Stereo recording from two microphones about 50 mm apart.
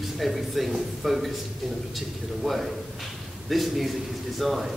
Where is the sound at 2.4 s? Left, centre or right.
Centre.